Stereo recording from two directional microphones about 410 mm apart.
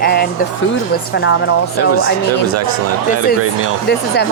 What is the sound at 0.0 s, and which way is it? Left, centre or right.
Speech, left.